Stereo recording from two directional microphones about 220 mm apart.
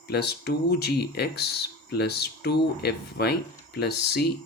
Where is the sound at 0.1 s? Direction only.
45° left (ahead or behind).